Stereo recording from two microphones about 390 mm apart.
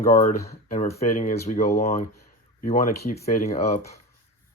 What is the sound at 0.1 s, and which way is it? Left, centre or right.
Speech, centre.